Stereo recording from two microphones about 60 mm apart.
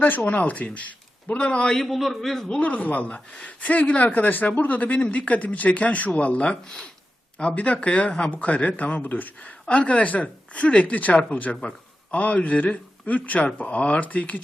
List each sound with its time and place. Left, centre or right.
0.3 s speech: left
1.8 s a man's voice: centre
2.6 s speech: left